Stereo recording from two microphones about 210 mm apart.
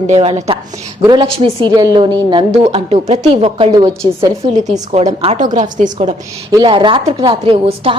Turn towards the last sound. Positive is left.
turn(degrees=-25)  # may be behind; listen again after turning